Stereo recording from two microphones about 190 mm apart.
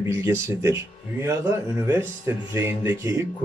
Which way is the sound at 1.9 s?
10° right (ahead or behind).